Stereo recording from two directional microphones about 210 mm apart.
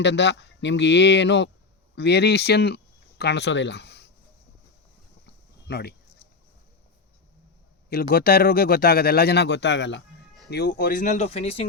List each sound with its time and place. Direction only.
0.0 s speech: 55° left (ahead or behind)
5.2 s a sound: 50° left (ahead or behind)
8.1 s speech: 45° left (ahead or behind); by 11.6 s 25° left (ahead or behind)